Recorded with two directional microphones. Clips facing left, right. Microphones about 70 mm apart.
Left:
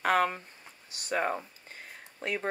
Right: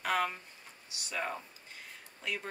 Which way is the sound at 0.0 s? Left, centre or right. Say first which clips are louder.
Left 6 dB; left.